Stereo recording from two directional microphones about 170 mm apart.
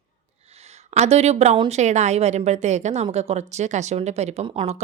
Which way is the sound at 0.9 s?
40° right (ahead or behind).